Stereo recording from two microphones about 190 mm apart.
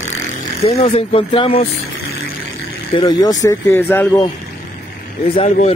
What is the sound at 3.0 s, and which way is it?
Speech, 20° left (ahead or behind).